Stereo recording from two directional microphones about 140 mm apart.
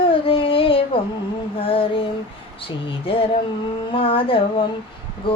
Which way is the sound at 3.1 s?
40° left (ahead or behind).